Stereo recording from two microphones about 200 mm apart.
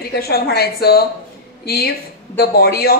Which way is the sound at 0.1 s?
50° left (ahead or behind).